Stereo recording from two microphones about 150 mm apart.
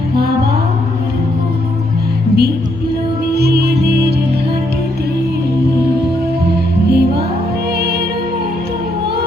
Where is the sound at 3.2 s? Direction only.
90° right.